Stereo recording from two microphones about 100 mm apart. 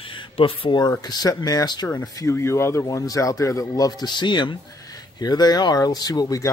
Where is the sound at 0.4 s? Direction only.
50° left (ahead or behind).